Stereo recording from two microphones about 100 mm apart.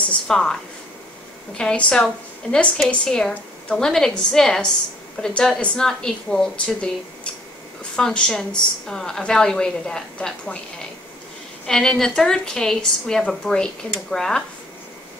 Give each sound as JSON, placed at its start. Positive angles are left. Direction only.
{"t": 0.1, "sound": "a woman's voice", "side_deg": 5}
{"t": 1.6, "sound": "a woman's voice", "side_deg": 10}
{"t": 7.9, "sound": "a woman's voice", "side_deg": 5}
{"t": 11.6, "sound": "a woman's voice", "side_deg": 5}